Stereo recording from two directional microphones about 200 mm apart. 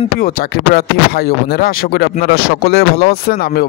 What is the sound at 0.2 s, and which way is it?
A man's voice, 50° left (ahead or behind).